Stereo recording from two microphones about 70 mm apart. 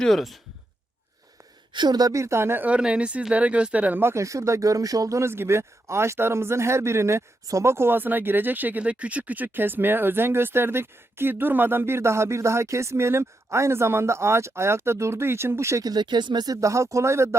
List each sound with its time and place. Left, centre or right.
0.0 s speech: centre
1.8 s speech: right
2.1 s speech: right
2.6 s speech: centre
4.0 s speech: right
15.8 s speech: right
16.6 s speech: right